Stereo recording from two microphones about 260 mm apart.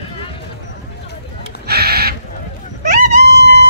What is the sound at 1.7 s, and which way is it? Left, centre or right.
Crow, right.